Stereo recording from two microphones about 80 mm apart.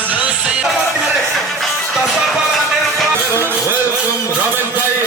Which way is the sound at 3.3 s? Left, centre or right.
Right.